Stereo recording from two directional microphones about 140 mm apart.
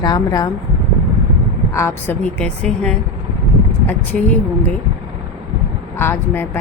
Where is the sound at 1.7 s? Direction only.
20° left (ahead or behind).